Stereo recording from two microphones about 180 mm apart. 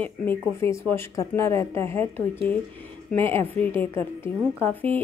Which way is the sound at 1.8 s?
35° right (ahead or behind).